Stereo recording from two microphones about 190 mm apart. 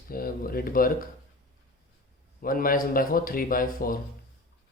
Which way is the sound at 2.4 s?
50° left (ahead or behind).